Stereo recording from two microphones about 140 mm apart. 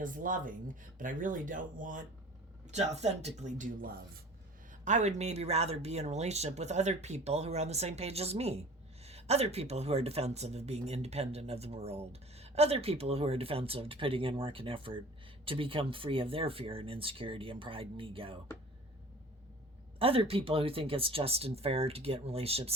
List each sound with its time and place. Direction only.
0.0 s speech: 75° right (ahead or behind)
2.6 s speech: 50° right (ahead or behind); by 3.9 s 75° right (ahead or behind)
4.9 s speech: 55° right (ahead or behind); by 18.3 s 40° right (ahead or behind)
20.0 s speech: 40° right (ahead or behind)